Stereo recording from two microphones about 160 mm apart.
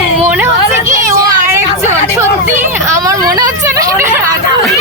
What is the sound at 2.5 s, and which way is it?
Speech, 20° right (ahead or behind).